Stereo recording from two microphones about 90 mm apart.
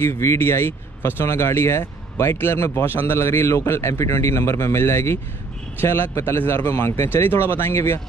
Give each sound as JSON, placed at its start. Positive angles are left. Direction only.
{"t": 0.0, "sound": "a man's voice", "side_deg": 30}